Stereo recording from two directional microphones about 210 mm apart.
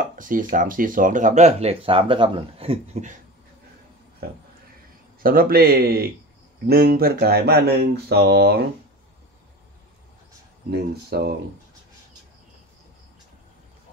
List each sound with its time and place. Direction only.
0.1 s speech: 40° right (ahead or behind)
5.2 s speech: 45° right (ahead or behind)
10.7 s speech: 50° right (ahead or behind)